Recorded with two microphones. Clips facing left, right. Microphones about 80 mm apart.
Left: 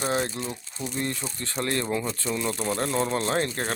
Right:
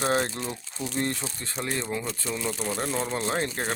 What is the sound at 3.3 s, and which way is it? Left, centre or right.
Speech, right.